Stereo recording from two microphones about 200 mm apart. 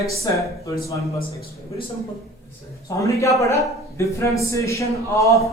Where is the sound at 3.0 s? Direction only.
15° left (ahead or behind).